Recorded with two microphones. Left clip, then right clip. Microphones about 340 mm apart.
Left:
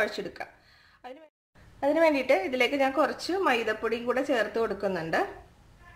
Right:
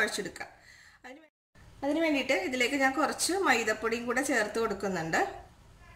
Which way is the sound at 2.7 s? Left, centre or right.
Centre.